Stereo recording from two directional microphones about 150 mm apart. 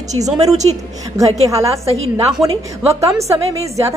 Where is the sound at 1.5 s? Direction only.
20° right (ahead or behind).